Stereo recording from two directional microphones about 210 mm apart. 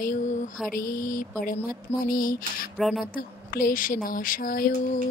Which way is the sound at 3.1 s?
45° left (ahead or behind).